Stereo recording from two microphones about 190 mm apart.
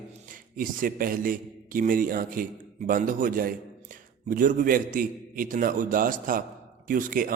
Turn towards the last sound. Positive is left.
turn(degrees=-45)  # may be behind; listen again after turning